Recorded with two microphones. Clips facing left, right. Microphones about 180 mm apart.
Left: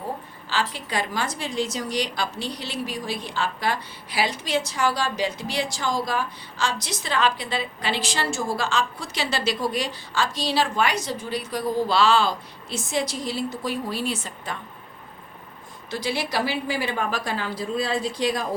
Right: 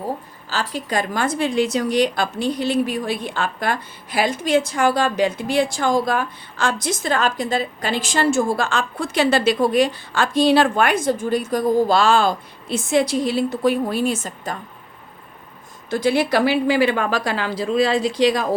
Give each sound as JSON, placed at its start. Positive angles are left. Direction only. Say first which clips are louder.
{"t": 0.5, "sound": "a woman's voice", "louder": "right 4 dB", "side_deg": -45}
{"t": 15.9, "sound": "a woman's voice", "louder": "right 9 dB", "side_deg": -50}